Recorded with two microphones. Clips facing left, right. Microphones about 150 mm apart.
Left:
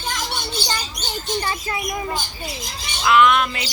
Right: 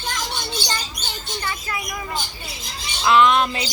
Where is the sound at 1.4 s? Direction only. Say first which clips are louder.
Left 3 dB; 30° left (ahead or behind).